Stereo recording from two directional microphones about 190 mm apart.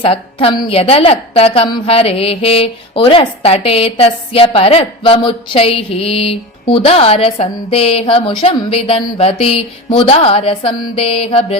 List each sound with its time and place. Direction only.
0.0 s a woman's voice: 30° left (ahead or behind)